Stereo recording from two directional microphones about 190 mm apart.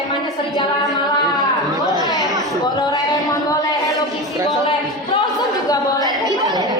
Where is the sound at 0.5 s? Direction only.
20° left (ahead or behind).